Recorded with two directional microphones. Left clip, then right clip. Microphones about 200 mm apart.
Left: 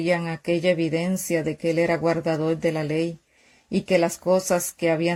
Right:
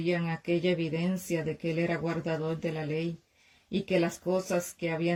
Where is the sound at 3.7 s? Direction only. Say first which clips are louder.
Left 8 dB; centre (ahead or behind).